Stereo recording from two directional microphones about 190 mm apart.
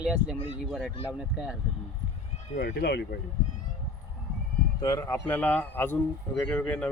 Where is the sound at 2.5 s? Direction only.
55° left (ahead or behind).